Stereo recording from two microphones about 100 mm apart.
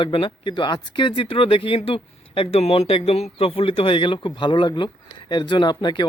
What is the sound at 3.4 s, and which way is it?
Speech, 70° left (ahead or behind).